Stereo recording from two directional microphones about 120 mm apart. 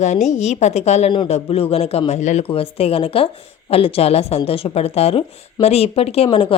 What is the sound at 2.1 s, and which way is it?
Speech, 75° left (ahead or behind).